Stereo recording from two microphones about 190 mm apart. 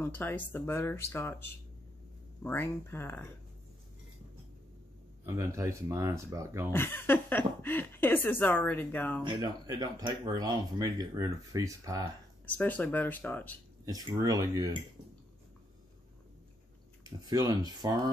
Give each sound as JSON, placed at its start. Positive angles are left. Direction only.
{"t": 0.0, "sound": "speech", "side_deg": 10}
{"t": 5.2, "sound": "speech", "side_deg": -15}
{"t": 6.7, "sound": "speech", "side_deg": 10}
{"t": 9.8, "sound": "speech", "side_deg": -20}
{"t": 12.4, "sound": "speech", "side_deg": 10}
{"t": 13.8, "sound": "speech", "side_deg": -20}
{"t": 17.0, "sound": "speech", "side_deg": -20}